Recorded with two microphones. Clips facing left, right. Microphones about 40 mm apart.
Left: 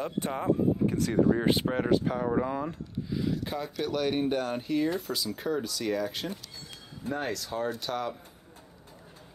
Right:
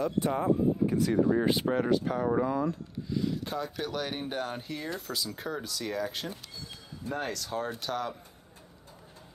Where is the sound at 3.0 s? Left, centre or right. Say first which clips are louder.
Even; centre.